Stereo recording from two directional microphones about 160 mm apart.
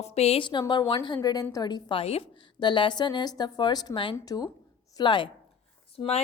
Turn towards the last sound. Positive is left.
turn(degrees=40)  # may be behind; listen again after turning